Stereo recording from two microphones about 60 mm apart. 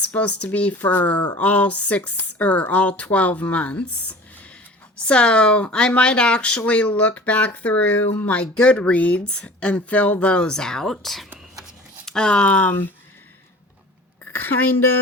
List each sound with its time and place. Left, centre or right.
0.0 s speech: left
0.8 s speech: left
8.3 s speech: centre
14.3 s a sound: left